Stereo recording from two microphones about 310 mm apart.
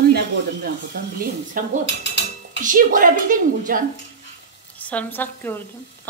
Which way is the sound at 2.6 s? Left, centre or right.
Right.